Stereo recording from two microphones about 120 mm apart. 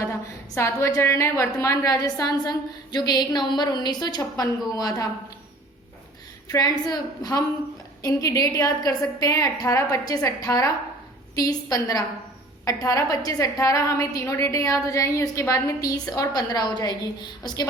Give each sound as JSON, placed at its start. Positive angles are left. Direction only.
{"t": 0.0, "sound": "a woman's voice", "side_deg": 25}
{"t": 6.5, "sound": "a woman's voice", "side_deg": 35}